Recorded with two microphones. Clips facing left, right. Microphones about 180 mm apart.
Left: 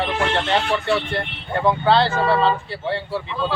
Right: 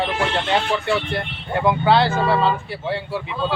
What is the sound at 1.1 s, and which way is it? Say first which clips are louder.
Speech: even; 10° right (ahead or behind).